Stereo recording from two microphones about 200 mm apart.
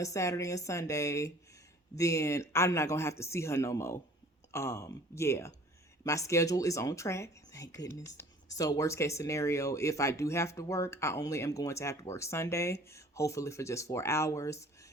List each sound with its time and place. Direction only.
0.0 s speech: 15° left (ahead or behind)